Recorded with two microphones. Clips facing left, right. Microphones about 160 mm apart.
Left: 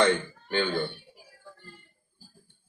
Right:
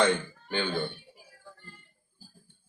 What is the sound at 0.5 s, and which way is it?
Speech, 15° right (ahead or behind).